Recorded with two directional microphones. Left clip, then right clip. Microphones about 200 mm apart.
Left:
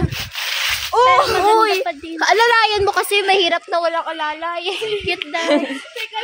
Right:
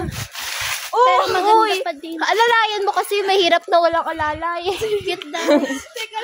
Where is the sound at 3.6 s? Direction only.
55° right (ahead or behind).